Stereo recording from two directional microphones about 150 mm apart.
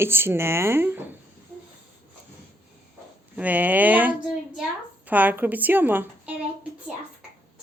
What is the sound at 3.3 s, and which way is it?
A woman's voice, 10° right (ahead or behind).